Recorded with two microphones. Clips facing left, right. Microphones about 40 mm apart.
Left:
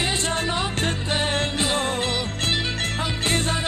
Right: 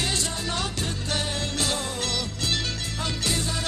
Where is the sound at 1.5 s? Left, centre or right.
Left.